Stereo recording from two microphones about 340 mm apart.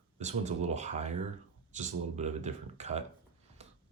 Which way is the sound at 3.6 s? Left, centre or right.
Centre.